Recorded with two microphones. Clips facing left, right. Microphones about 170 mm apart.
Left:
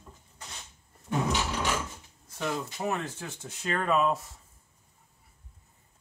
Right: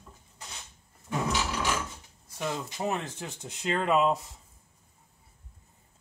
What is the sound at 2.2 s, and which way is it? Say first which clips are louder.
Speech: left 1 dB; 15° right (ahead or behind).